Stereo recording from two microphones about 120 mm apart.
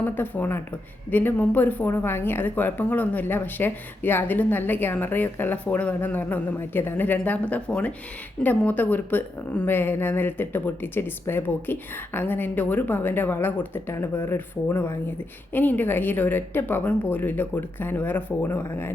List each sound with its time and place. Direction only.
0.0 s a woman's voice: 15° left (ahead or behind)